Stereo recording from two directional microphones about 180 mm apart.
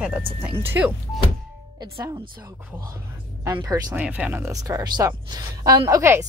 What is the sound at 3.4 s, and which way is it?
A woman's voice, 20° right (ahead or behind).